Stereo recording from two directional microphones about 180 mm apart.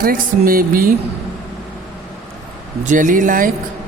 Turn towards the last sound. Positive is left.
turn(degrees=-50)  # may be behind; listen again after turning